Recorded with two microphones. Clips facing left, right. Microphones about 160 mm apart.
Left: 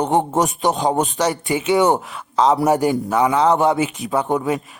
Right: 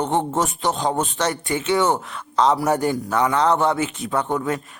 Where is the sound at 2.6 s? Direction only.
20° left (ahead or behind).